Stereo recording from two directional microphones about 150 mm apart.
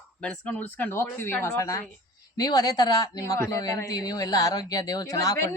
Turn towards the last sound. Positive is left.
turn(degrees=20)  # may be behind; listen again after turning